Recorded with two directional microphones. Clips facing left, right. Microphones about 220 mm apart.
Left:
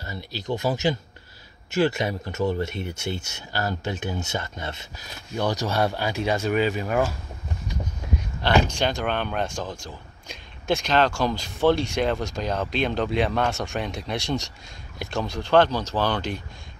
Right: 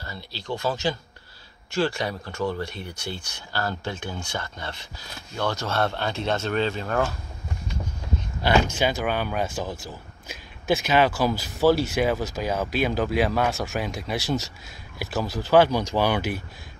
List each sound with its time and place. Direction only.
0.0 s speech: 20° left (ahead or behind)
8.4 s speech: 10° right (ahead or behind)